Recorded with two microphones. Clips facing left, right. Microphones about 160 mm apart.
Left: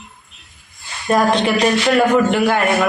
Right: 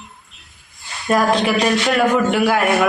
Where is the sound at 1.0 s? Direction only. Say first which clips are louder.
Left 1 dB; centre (ahead or behind).